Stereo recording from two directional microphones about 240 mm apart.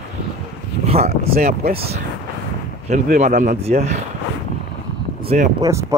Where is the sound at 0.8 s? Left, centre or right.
Right.